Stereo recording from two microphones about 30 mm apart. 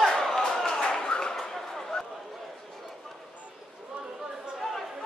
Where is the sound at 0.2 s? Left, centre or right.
Centre.